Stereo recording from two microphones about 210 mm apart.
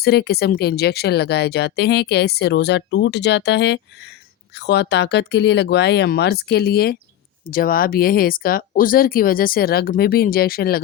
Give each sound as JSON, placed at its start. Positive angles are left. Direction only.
{"t": 0.0, "sound": "speech", "side_deg": 50}